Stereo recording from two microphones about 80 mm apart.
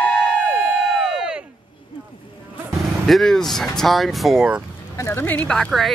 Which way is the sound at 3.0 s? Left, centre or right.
Centre.